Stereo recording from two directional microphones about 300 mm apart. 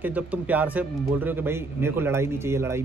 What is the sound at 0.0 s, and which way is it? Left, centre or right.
Speech, centre.